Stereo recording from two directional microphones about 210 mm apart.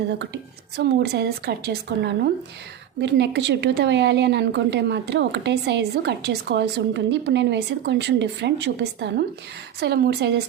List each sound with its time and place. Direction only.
0.8 s a woman's voice: 55° right (ahead or behind)